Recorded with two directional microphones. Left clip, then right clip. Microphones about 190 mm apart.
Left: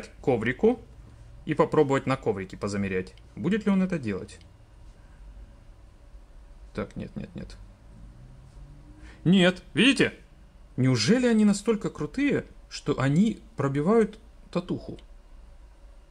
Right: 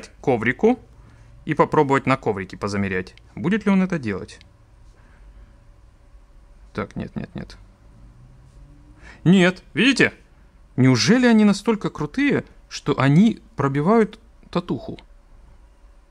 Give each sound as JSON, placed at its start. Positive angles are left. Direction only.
{"t": 0.0, "sound": "speech", "side_deg": -25}
{"t": 6.7, "sound": "speech", "side_deg": -25}
{"t": 9.0, "sound": "speech", "side_deg": -25}
{"t": 10.8, "sound": "speech", "side_deg": -25}